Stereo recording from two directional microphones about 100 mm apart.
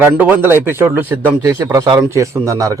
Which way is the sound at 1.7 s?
40° right (ahead or behind).